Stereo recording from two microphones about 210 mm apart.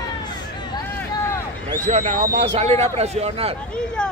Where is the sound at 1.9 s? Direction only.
35° right (ahead or behind).